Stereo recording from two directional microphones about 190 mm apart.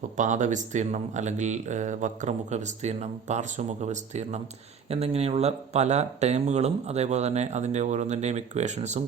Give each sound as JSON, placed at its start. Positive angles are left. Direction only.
{"t": 0.2, "sound": "speech", "side_deg": -40}